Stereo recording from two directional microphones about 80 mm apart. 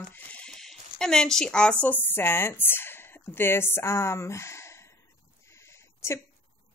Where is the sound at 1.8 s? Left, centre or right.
Left.